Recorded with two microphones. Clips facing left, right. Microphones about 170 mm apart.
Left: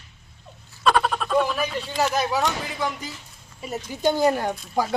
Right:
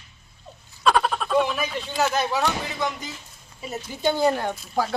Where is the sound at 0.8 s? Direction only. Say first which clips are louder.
Even; centre (ahead or behind).